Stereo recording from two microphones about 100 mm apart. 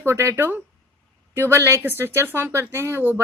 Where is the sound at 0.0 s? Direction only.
25° right (ahead or behind).